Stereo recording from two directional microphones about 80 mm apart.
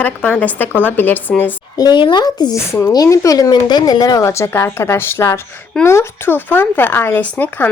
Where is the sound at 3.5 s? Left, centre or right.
Left.